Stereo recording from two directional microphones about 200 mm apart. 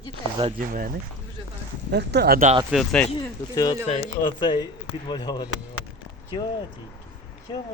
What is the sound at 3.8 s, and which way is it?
Speech, 30° left (ahead or behind).